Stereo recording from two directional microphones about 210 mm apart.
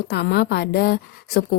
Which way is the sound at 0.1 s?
50° left (ahead or behind).